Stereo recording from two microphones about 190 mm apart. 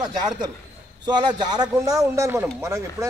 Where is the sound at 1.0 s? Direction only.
25° right (ahead or behind).